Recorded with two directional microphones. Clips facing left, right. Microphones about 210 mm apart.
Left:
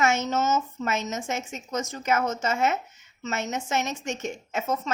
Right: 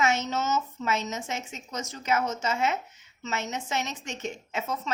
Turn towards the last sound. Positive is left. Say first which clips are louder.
# left 3 dB
turn(degrees=45)  # may be behind; listen again after turning